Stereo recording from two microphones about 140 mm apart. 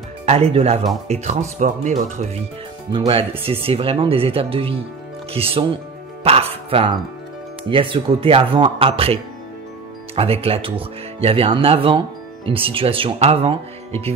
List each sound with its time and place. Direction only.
0.2 s speech: 45° right (ahead or behind)
2.9 s speech: 40° right (ahead or behind)